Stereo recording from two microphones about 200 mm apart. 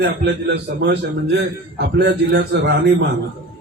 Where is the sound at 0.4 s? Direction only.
60° right (ahead or behind).